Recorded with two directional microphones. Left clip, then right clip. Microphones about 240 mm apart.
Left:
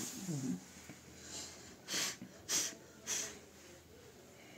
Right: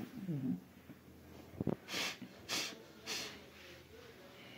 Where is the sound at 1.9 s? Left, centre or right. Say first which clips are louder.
Left 1 dB; centre.